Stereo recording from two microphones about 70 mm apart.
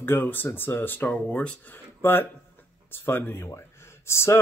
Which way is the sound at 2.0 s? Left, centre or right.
Left.